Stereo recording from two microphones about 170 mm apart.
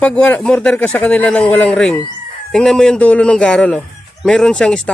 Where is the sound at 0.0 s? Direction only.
5° left (ahead or behind).